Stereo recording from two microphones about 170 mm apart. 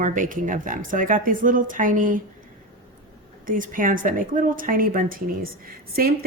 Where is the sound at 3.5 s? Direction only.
55° right (ahead or behind).